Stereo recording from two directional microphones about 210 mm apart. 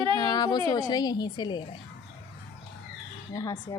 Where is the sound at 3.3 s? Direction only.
15° left (ahead or behind).